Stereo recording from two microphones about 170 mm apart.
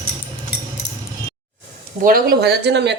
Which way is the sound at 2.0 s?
60° right (ahead or behind).